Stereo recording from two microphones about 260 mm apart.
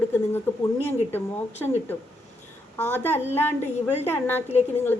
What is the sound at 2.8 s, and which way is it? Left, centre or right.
A woman's voice, centre.